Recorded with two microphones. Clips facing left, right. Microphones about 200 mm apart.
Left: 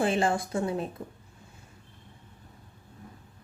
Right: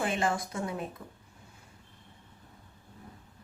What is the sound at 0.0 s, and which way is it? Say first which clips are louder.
Speech: left 4 dB; 30° left (ahead or behind).